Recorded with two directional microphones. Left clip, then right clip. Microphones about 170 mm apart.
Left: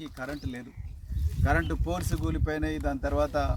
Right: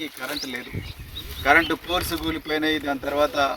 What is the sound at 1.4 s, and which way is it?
Speech, 15° left (ahead or behind).